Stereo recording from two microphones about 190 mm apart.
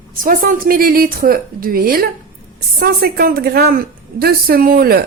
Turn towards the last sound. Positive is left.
turn(degrees=-50)  # may be behind; listen again after turning